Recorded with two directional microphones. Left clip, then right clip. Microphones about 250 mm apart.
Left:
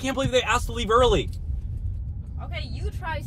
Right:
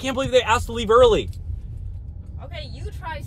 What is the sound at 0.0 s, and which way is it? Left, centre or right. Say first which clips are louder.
Speech: right 4 dB; centre.